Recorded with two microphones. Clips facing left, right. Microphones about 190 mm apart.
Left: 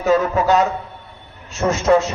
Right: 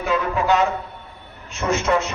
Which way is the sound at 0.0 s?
40° left (ahead or behind).